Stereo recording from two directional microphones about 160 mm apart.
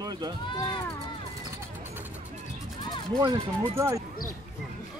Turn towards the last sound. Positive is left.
turn(degrees=-15)  # may be behind; listen again after turning